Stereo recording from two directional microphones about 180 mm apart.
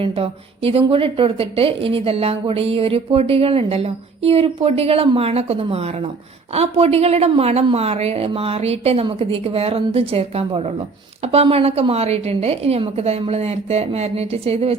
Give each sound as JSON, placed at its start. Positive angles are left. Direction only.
{"t": 0.0, "sound": "a woman's voice", "side_deg": -30}